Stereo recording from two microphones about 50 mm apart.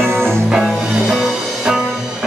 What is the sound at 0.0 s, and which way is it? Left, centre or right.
Music, right.